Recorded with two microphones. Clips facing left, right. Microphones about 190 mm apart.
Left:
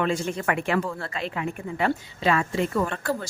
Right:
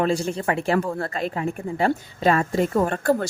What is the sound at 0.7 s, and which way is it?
A woman's voice, 45° right (ahead or behind).